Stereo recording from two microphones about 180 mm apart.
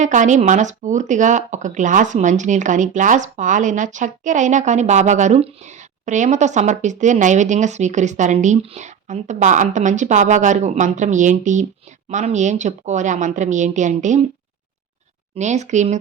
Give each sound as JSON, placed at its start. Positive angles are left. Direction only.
{"t": 0.0, "sound": "a woman's voice", "side_deg": -45}
{"t": 15.4, "sound": "speech", "side_deg": -40}